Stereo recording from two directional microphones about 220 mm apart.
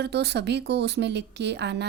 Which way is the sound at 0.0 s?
50° right (ahead or behind).